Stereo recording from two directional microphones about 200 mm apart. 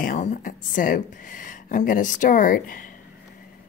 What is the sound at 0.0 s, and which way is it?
Speech, 40° left (ahead or behind).